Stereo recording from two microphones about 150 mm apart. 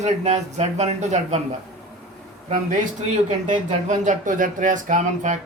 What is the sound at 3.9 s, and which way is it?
Speech, 60° right (ahead or behind).